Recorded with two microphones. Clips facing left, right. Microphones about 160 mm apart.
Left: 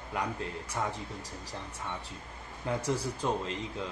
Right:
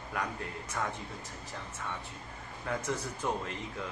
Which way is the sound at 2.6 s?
30° left (ahead or behind).